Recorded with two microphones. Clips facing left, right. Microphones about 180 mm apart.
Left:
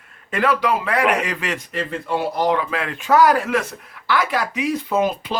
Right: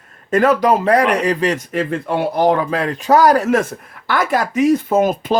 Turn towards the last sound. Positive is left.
turn(degrees=-45)  # may be behind; listen again after turning